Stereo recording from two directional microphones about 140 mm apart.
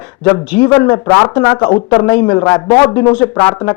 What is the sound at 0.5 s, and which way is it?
Speech, 10° left (ahead or behind).